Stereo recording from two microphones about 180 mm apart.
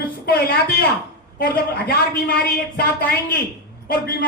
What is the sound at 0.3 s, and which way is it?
A woman's voice, 60° left (ahead or behind).